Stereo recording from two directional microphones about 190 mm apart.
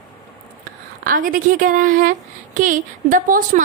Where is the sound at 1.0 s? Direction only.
45° right (ahead or behind).